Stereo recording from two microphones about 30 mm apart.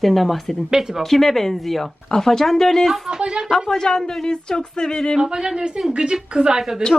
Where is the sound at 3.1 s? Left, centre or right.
Right.